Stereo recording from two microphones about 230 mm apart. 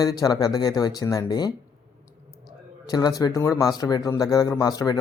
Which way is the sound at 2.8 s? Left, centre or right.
Centre.